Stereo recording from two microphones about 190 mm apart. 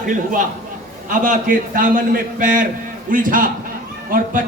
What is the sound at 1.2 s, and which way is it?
Speech, 45° right (ahead or behind).